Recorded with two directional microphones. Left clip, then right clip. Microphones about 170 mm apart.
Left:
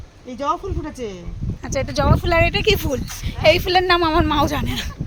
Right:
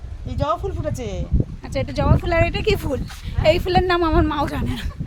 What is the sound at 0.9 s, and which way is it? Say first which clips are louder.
Speech: left 1 dB; 65° right (ahead or behind).